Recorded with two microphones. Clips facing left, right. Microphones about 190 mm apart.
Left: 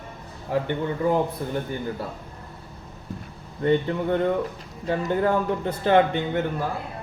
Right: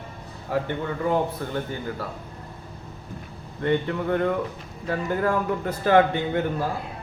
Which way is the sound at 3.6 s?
20° left (ahead or behind).